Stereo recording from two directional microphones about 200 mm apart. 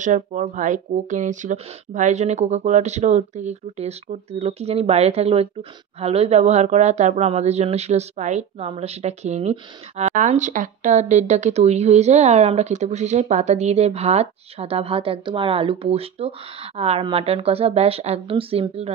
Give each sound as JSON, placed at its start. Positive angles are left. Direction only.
{"t": 0.0, "sound": "speech", "side_deg": -40}